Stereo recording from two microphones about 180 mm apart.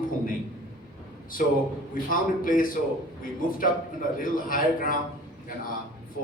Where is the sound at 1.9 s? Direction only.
50° left (ahead or behind).